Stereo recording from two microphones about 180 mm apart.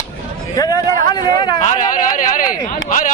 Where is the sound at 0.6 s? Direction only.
20° left (ahead or behind).